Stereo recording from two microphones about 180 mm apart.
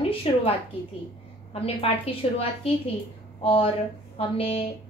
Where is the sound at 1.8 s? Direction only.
35° left (ahead or behind).